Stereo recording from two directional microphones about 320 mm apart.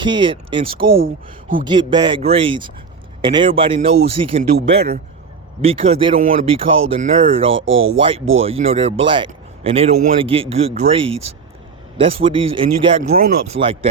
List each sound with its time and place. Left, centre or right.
0.0 s speech: centre
5.6 s speech: centre
7.6 s speech: right
7.9 s speech: centre